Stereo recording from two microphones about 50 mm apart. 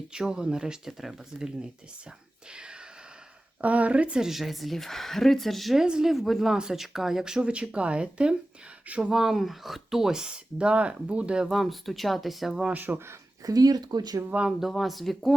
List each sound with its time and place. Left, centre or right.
0.1 s speech: centre
2.5 s a sound: centre
3.6 s speech: right
4.2 s speech: centre
5.8 s speech: centre
11.5 s speech: centre
12.7 s speech: right
14.3 s speech: right
14.7 s speech: centre